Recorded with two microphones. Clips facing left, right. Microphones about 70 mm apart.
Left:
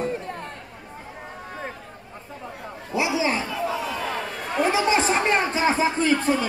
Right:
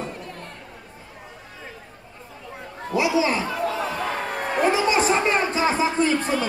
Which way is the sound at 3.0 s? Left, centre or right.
Left.